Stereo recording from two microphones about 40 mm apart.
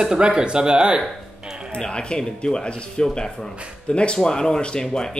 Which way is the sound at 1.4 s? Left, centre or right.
Centre.